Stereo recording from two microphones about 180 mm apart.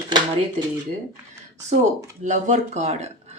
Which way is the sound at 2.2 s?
40° right (ahead or behind).